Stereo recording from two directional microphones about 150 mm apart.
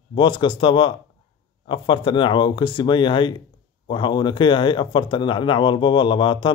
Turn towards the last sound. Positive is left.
turn(degrees=30)  # may be behind; listen again after turning